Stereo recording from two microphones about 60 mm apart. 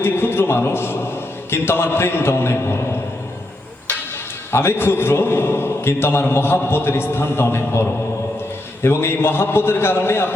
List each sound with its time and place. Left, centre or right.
0.0 s a man's voice: left
4.5 s a man's voice: left